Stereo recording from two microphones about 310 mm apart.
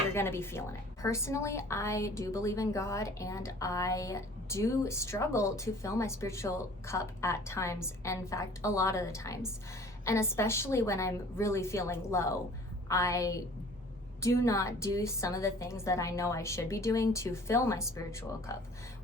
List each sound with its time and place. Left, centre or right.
0.1 s a woman's voice: centre